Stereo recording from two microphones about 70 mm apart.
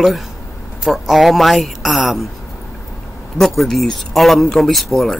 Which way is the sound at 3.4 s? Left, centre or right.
Centre.